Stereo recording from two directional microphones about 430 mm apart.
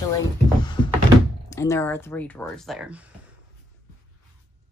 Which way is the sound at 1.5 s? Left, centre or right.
Centre.